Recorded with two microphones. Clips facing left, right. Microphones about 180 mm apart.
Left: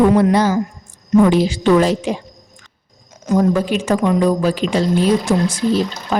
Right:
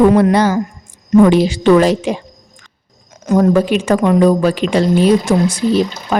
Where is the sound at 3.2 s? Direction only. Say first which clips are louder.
Right 4 dB; 60° right (ahead or behind).